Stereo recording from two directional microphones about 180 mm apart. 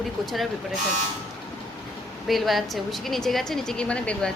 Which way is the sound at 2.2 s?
Centre (ahead or behind).